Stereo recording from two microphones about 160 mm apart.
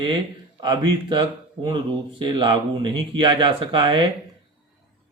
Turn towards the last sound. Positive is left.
turn(degrees=-35)  # may be behind; listen again after turning